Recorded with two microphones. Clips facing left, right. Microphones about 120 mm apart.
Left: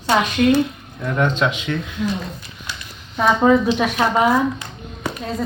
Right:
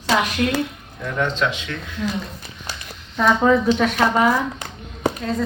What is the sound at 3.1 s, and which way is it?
Speech, 10° left (ahead or behind).